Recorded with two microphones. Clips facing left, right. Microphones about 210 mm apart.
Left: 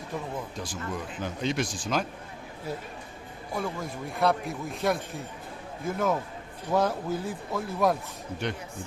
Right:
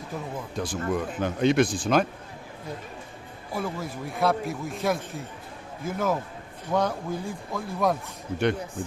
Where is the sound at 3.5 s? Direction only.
5° right (ahead or behind).